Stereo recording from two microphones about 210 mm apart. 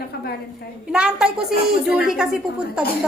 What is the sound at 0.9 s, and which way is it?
A woman's voice, 5° right (ahead or behind).